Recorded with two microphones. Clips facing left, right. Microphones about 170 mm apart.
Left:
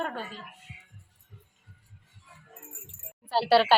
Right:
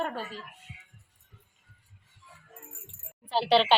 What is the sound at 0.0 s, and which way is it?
Music, centre (ahead or behind).